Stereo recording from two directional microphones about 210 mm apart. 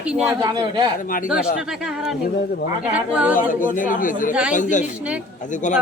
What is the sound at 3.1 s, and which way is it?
Speech, 5° right (ahead or behind).